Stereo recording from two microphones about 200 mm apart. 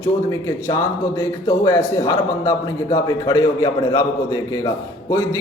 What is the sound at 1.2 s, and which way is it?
A man's voice, 15° left (ahead or behind).